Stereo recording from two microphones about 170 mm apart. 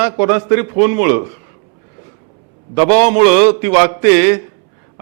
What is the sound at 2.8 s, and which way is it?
A man's voice, 10° right (ahead or behind).